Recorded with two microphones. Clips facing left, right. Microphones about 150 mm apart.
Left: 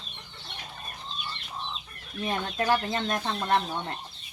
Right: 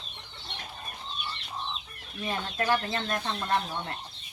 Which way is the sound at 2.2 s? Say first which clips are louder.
Left 2 dB; 15° left (ahead or behind).